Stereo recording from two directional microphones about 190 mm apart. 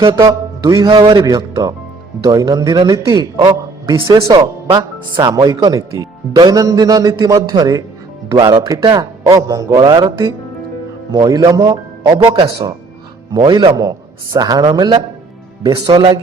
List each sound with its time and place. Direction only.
0.0 s a man's voice: 20° right (ahead or behind)